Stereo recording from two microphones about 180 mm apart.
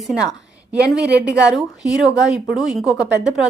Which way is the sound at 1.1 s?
70° right (ahead or behind).